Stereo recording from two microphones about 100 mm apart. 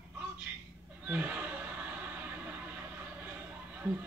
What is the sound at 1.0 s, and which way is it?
Speech, 15° right (ahead or behind).